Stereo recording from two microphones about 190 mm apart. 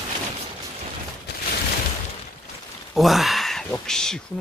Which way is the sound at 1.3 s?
60° left (ahead or behind).